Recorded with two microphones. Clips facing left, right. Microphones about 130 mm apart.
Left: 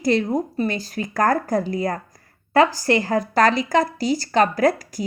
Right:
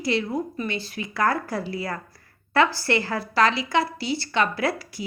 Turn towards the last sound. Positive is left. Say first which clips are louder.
# left 7 dB
turn(degrees=40)  # may be behind; listen again after turning